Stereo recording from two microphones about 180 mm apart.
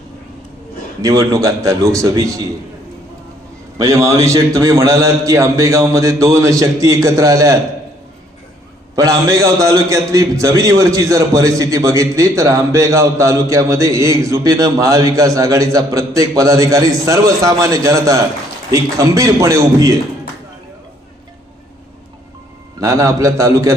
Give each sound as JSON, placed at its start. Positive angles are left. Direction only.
{"t": 1.0, "sound": "a man's voice", "side_deg": -20}
{"t": 3.8, "sound": "a man's voice", "side_deg": -15}
{"t": 9.0, "sound": "a man's voice", "side_deg": -20}
{"t": 22.8, "sound": "a man's voice", "side_deg": -15}